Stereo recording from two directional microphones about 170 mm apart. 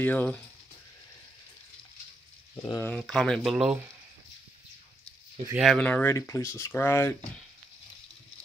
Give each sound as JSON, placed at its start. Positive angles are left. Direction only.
{"t": 0.0, "sound": "speech", "side_deg": 10}
{"t": 2.5, "sound": "speech", "side_deg": 30}
{"t": 2.8, "sound": "speech", "side_deg": 5}
{"t": 5.5, "sound": "speech", "side_deg": 0}